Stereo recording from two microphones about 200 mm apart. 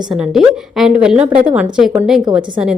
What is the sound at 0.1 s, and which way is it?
A woman's voice, centre (ahead or behind).